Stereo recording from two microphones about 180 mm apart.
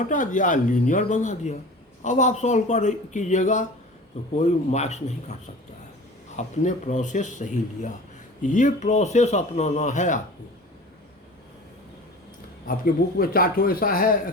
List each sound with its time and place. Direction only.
0.0 s speech: 45° left (ahead or behind)
12.6 s speech: 55° left (ahead or behind)